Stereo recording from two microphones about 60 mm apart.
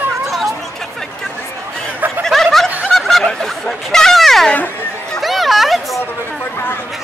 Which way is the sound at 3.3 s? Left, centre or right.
Centre.